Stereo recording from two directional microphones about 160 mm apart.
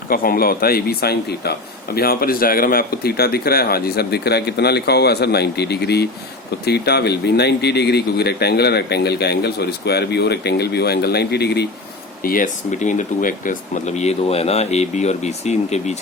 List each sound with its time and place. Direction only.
0.1 s speech: 65° left (ahead or behind); by 1.5 s 80° left
2.0 s speech: 65° left (ahead or behind); by 11.7 s 90° left
12.2 s speech: 60° left (ahead or behind); by 16.0 s 45° left (ahead or behind)